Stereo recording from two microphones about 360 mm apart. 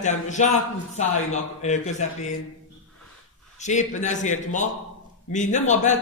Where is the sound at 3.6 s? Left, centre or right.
Centre.